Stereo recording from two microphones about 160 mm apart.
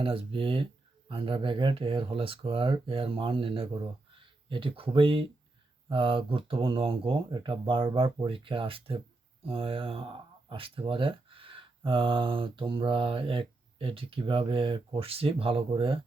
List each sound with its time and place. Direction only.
0.0 s speech: 35° right (ahead or behind)